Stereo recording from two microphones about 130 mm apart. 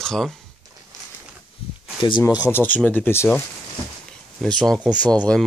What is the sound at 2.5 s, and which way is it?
Speech, 15° left (ahead or behind).